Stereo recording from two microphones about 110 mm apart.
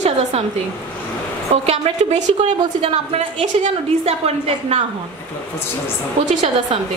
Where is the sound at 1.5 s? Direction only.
90° right; by 3.3 s 75° right (ahead or behind).